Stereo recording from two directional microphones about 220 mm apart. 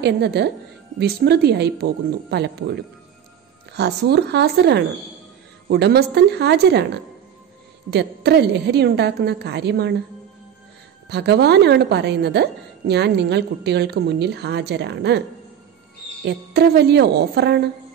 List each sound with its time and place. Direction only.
0.0 s a woman's voice: 50° right (ahead or behind)
11.1 s a woman's voice: 50° right (ahead or behind)
16.3 s a woman's voice: 50° right (ahead or behind)